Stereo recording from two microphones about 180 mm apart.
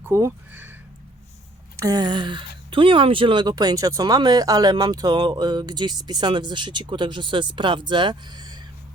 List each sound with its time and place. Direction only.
0.0 s speech: 15° right (ahead or behind)
1.7 s speech: 20° right (ahead or behind)